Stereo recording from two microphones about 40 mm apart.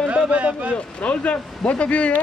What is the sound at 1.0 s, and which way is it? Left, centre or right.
Speech, left.